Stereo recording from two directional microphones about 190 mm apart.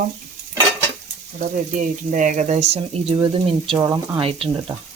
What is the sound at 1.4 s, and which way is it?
Speech, 40° right (ahead or behind).